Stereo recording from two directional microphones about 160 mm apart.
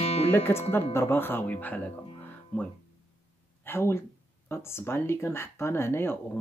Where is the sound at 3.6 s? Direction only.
15° left (ahead or behind).